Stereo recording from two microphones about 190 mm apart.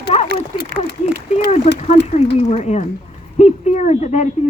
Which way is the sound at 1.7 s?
35° left (ahead or behind).